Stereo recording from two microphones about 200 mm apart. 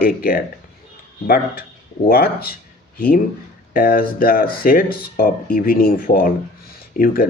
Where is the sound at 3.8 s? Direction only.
45° left (ahead or behind).